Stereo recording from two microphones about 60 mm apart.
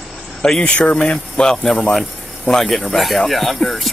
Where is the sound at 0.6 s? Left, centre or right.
Centre.